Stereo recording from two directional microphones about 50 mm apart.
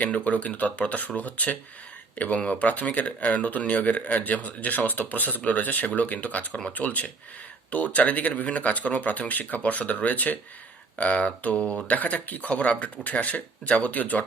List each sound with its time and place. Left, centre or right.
0.0 s speech: left
10.9 s a sound: left
11.9 s speech: left